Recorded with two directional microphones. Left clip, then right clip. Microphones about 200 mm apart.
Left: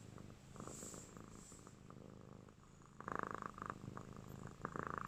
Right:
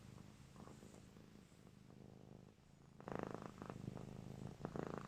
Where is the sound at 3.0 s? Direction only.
15° right (ahead or behind).